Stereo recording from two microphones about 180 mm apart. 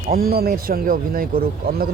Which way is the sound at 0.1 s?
55° right (ahead or behind).